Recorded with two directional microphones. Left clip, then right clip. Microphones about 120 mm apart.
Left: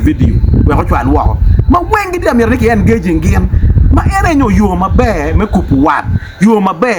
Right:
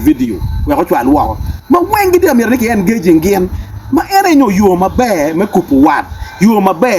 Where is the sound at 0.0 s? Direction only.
45° left (ahead or behind).